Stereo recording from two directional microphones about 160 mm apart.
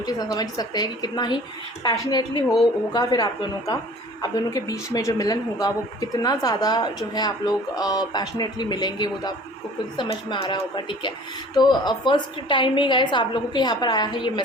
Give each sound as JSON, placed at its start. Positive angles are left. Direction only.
{"t": 0.0, "sound": "a woman's voice", "side_deg": 25}